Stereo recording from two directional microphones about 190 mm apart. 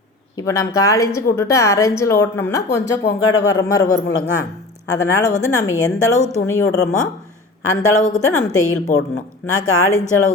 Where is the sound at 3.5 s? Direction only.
20° left (ahead or behind).